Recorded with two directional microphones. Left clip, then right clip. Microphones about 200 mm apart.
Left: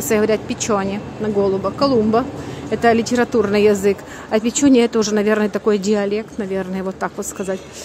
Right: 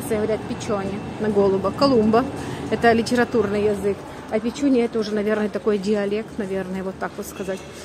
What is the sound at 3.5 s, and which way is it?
A woman's voice, 30° left (ahead or behind).